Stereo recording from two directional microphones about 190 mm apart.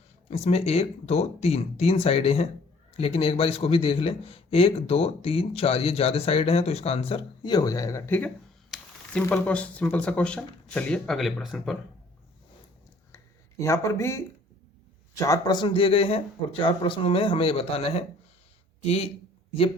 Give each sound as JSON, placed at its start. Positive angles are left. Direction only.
{"t": 0.3, "sound": "a man's voice", "side_deg": 35}
{"t": 13.6, "sound": "a man's voice", "side_deg": 15}